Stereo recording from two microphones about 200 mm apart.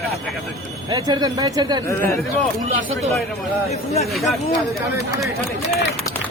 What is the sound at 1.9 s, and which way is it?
Speech, 15° left (ahead or behind).